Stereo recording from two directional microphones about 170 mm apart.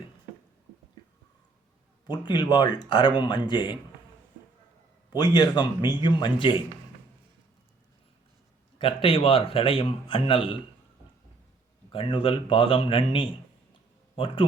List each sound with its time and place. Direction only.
2.0 s speech: 25° left (ahead or behind)
5.1 s speech: 25° left (ahead or behind)
8.8 s a man's voice: 35° left (ahead or behind)
11.9 s a man's voice: 30° left (ahead or behind)